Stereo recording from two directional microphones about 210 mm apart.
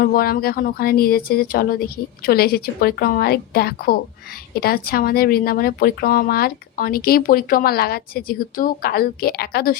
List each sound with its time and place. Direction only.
0.0 s speech: 45° left (ahead or behind)